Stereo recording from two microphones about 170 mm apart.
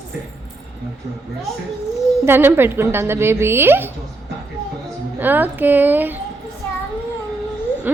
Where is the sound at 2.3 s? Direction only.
10° right (ahead or behind).